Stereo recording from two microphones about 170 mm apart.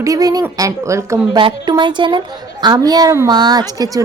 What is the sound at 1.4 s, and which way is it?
A woman's voice, 25° right (ahead or behind).